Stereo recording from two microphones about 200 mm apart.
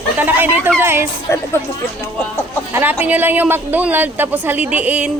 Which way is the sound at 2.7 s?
10° right (ahead or behind).